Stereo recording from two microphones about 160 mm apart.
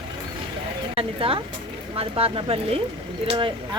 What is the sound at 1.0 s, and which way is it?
Speech, 35° right (ahead or behind).